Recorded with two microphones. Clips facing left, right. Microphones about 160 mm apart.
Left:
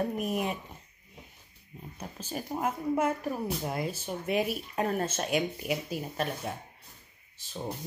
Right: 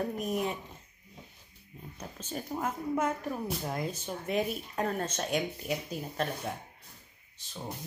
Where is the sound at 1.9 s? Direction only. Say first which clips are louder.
Left 2 dB; 10° left (ahead or behind).